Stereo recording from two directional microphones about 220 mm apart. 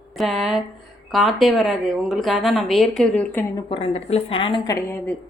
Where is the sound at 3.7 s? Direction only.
25° left (ahead or behind).